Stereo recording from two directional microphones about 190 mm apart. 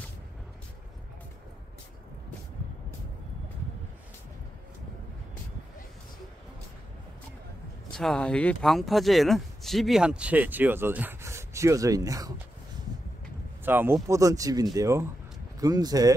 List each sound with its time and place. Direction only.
7.9 s speech: 5° left (ahead or behind); by 12.4 s 20° right (ahead or behind)
13.7 s speech: 10° right (ahead or behind)